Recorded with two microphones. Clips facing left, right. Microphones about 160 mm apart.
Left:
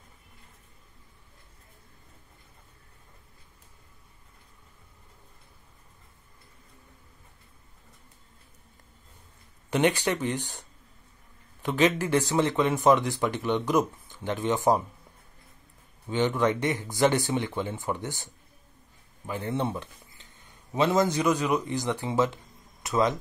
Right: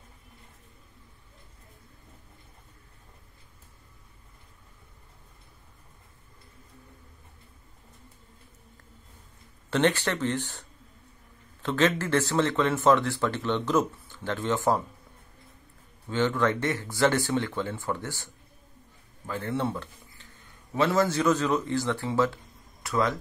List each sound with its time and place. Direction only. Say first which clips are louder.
9.7 s speech: even; 15° left (ahead or behind)
16.1 s a man's voice: left 1 dB; 15° left (ahead or behind)